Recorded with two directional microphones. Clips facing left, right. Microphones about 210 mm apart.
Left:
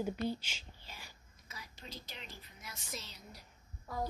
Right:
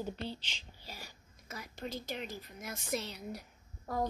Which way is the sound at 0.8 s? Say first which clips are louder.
Right 5 dB; 40° right (ahead or behind).